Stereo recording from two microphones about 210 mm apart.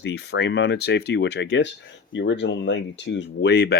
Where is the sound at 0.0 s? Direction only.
55° left (ahead or behind).